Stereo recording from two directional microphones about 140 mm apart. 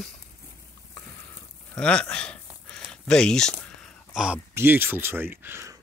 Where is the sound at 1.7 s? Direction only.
10° left (ahead or behind).